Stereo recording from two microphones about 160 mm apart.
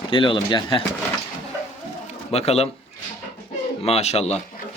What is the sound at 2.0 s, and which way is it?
Pigeon, 40° left (ahead or behind).